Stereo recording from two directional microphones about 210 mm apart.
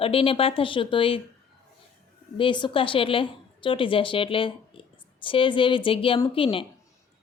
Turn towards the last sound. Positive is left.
turn(degrees=25)  # may be behind; listen again after turning